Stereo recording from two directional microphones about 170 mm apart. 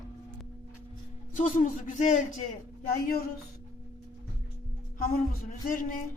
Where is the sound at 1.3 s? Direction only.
45° left (ahead or behind).